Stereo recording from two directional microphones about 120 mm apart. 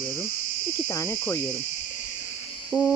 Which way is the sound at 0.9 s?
25° left (ahead or behind).